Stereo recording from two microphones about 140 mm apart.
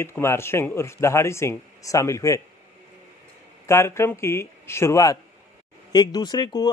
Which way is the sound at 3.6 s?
20° left (ahead or behind).